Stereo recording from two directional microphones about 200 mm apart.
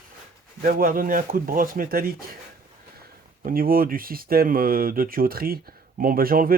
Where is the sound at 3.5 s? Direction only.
45° right (ahead or behind).